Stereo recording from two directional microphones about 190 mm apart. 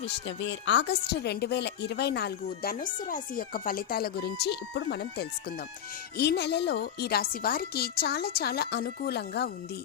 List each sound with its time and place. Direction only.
0.3 s a woman's voice: 70° left (ahead or behind)